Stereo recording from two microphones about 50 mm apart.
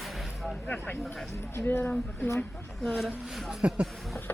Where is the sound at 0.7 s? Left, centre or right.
Left.